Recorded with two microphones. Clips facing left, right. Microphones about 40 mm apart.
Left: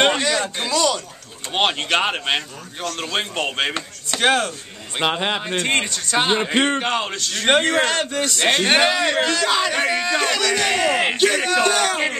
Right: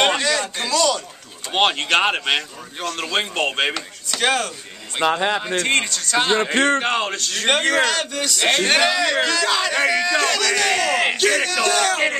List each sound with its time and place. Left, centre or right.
0.6 s a sound: centre
1.5 s speech: centre
3.7 s chopping: left
5.0 s speech: centre
5.7 s speech: left
6.8 s speech: centre
7.4 s speech: centre
7.9 s chopping: left
8.6 s speech: left
9.5 s speech: centre